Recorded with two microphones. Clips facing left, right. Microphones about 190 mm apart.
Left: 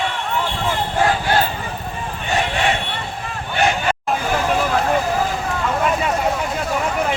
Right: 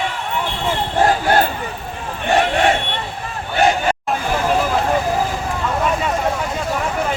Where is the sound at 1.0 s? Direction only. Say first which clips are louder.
Right 3 dB; 50° right (ahead or behind).